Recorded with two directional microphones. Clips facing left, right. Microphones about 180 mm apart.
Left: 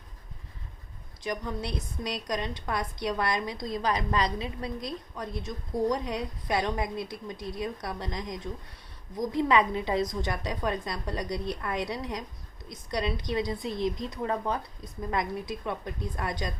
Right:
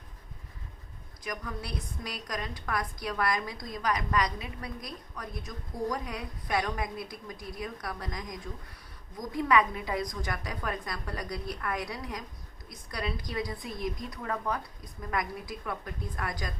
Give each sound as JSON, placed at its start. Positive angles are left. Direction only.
{"t": 1.2, "sound": "a woman's voice", "side_deg": 25}